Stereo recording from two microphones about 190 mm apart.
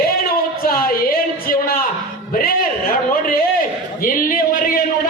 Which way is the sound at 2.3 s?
50° left (ahead or behind).